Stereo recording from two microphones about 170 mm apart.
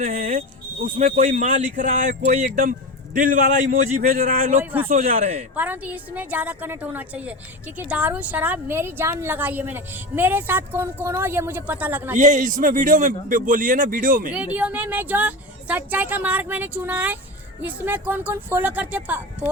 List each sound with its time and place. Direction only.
0.0 s speech: 50° right (ahead or behind)
5.1 s speech: 35° right (ahead or behind)
5.5 s a woman's voice: 10° right (ahead or behind)
12.1 s speech: 45° right (ahead or behind)
14.3 s a woman's voice: 10° right (ahead or behind)